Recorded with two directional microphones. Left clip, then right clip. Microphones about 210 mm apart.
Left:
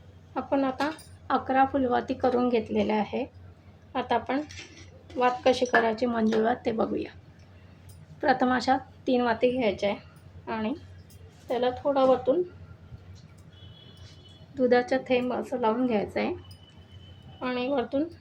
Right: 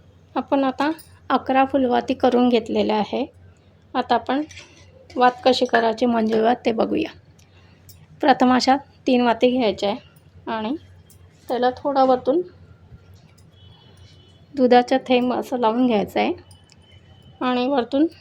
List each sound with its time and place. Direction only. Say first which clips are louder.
0.3 s speech: right 6 dB; 50° right (ahead or behind)
8.2 s a woman's voice: right 8 dB; 45° right (ahead or behind)
14.5 s speech: right 8 dB; 45° right (ahead or behind)
17.4 s speech: right 8 dB; 50° right (ahead or behind)